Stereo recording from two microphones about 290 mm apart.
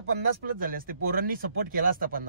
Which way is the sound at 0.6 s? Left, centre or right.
Right.